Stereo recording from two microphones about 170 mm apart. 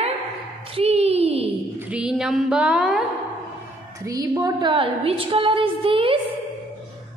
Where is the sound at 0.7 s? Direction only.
35° right (ahead or behind).